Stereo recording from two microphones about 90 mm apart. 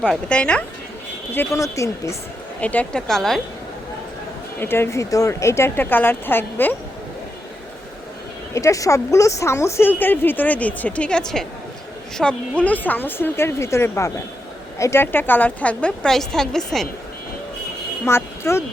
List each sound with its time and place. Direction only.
0.0 s a woman's voice: 10° left (ahead or behind)
1.5 s a woman's voice: 35° left (ahead or behind)
2.6 s a woman's voice: 15° left (ahead or behind)
3.1 s a woman's voice: 5° left (ahead or behind)
4.6 s speech: 25° left (ahead or behind)
8.5 s a woman's voice: 35° left (ahead or behind)
15.0 s a woman's voice: 20° left (ahead or behind); by 16.9 s 5° left (ahead or behind)
18.0 s speech: 30° left (ahead or behind)